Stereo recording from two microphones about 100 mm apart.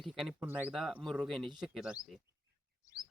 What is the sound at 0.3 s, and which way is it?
Speech, 20° right (ahead or behind).